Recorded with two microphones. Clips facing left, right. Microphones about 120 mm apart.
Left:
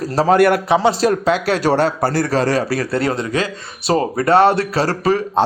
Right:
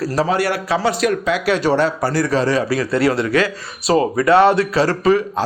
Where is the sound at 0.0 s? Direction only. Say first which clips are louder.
Left 1 dB; 30° left (ahead or behind).